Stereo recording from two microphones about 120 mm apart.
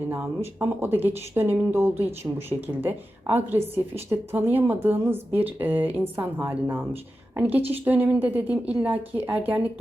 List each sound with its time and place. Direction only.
0.1 s speech: 15° right (ahead or behind)